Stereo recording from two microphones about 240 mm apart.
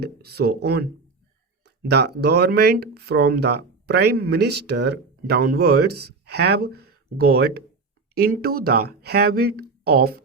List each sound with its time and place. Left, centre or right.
0.0 s speech: right